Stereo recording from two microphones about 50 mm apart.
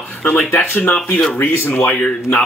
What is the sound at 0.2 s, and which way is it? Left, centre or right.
Speech, left.